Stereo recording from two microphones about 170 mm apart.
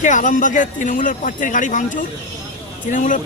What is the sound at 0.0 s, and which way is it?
A man's voice, 50° left (ahead or behind).